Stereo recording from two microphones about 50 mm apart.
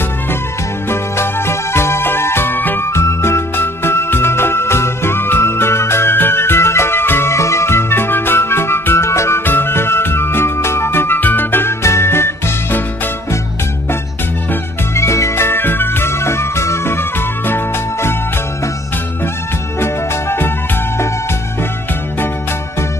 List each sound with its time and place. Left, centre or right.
0.8 s music: left
2.8 s music: left
7.3 s music: left
9.4 s music: left
11.8 s music: left
15.0 s music: left
19.8 s music: left